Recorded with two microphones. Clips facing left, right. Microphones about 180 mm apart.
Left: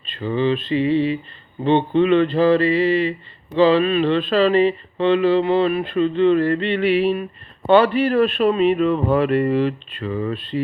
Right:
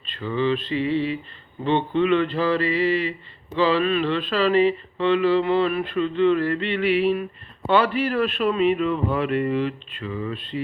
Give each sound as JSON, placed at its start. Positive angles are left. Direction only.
{"t": 0.2, "sound": "speech", "side_deg": 25}